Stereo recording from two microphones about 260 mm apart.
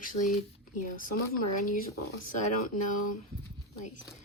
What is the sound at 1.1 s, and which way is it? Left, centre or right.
Speech, left.